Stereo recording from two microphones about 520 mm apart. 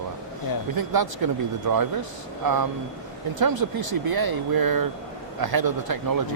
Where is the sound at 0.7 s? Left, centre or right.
Right.